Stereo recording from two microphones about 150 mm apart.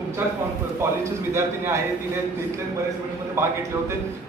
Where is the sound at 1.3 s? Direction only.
20° right (ahead or behind).